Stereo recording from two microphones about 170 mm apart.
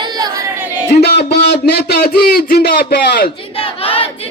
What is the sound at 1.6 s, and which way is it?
Mantra, 70° left (ahead or behind).